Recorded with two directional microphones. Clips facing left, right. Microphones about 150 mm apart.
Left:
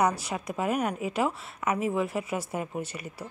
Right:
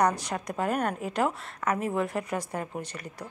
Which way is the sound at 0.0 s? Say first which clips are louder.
Right 1 dB; 5° left (ahead or behind).